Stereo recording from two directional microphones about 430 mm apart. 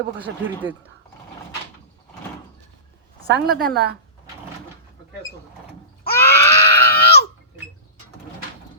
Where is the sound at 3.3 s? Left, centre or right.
Right.